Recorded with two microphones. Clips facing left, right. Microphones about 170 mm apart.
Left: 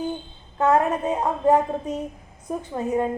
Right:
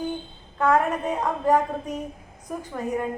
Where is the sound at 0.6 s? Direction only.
25° left (ahead or behind).